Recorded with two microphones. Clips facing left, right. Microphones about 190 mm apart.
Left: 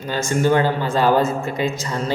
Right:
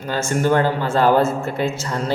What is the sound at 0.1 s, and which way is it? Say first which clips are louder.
Speech: even; 15° left (ahead or behind).